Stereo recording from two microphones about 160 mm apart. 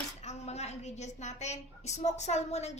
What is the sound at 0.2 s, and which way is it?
A child's voice, 45° left (ahead or behind).